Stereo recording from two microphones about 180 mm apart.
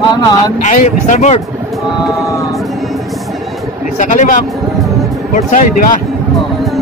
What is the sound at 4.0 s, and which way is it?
Speech, 45° left (ahead or behind).